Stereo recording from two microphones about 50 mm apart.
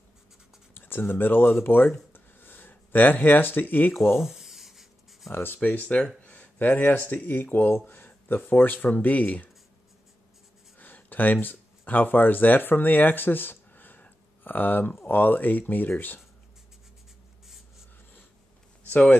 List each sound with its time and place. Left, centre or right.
0.7 s speech: left
2.1 s a sound: left
4.1 s rub: centre
5.3 s speech: left
5.6 s speech: left
10.8 s speech: left